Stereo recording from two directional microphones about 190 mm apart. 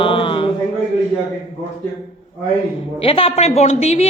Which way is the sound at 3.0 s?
30° left (ahead or behind).